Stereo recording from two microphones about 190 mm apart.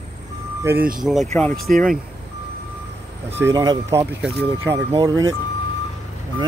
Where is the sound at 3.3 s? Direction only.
15° right (ahead or behind).